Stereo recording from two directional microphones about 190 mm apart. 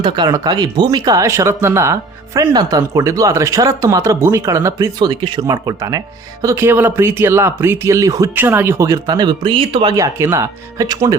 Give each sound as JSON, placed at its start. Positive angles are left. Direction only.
{"t": 0.0, "sound": "speech", "side_deg": -20}